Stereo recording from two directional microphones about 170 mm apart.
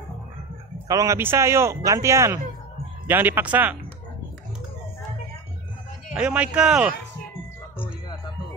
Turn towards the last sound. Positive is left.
turn(degrees=-5)  # may be behind; listen again after turning